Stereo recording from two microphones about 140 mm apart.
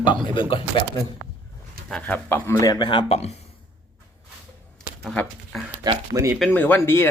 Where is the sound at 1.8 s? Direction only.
5° left (ahead or behind).